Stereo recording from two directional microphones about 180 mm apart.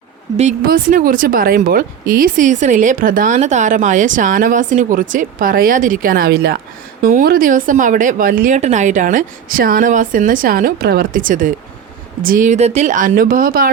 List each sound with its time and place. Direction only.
0.6 s speech: 50° right (ahead or behind)